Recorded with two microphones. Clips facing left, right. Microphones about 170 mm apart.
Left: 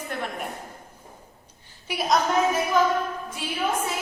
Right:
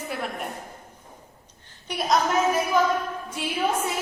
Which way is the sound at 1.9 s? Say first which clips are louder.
Even; centre (ahead or behind).